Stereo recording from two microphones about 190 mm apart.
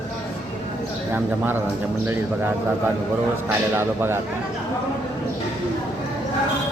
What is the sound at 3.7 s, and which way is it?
Speech, 10° right (ahead or behind).